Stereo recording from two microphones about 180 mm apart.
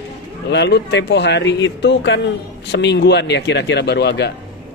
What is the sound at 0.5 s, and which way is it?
Speech, 70° left (ahead or behind).